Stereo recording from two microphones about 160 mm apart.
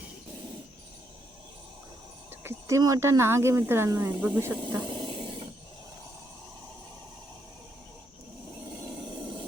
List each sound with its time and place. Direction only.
2.4 s speech: 15° right (ahead or behind)
4.6 s speech: 30° right (ahead or behind)